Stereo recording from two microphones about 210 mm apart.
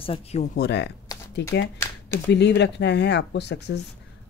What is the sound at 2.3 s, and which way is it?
Speech, 55° left (ahead or behind).